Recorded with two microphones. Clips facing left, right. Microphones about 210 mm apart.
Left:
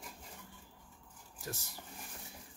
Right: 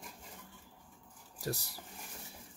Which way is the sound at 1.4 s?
35° right (ahead or behind).